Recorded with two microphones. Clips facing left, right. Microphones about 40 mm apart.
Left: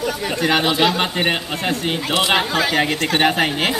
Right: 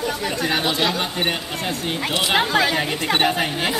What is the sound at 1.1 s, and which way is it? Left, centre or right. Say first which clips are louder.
Speech: left 3 dB; left.